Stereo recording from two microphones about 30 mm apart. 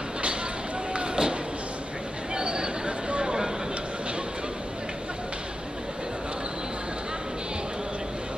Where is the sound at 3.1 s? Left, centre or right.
Right.